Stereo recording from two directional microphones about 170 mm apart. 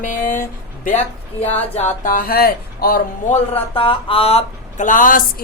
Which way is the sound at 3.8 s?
30° left (ahead or behind).